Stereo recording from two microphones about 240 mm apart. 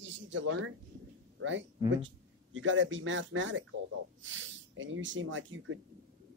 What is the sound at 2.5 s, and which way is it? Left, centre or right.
Speech, right.